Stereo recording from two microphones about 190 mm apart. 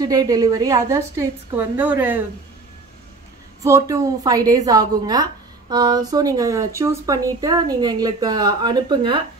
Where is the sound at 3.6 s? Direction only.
20° right (ahead or behind).